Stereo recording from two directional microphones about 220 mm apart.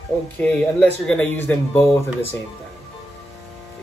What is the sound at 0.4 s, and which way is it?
Speech, 5° left (ahead or behind).